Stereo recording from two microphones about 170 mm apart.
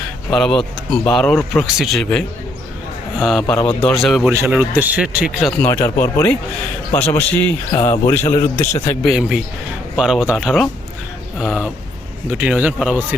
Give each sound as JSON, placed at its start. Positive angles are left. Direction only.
{"t": 0.3, "sound": "speech", "side_deg": 5}
{"t": 4.3, "sound": "speech", "side_deg": -15}
{"t": 5.6, "sound": "speech", "side_deg": 15}
{"t": 7.7, "sound": "speech", "side_deg": 25}
{"t": 9.0, "sound": "speech", "side_deg": 0}